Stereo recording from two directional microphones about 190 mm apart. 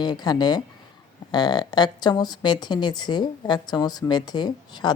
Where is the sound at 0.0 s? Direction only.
20° left (ahead or behind).